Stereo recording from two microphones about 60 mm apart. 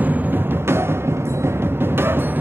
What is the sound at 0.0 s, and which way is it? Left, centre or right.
Music, right.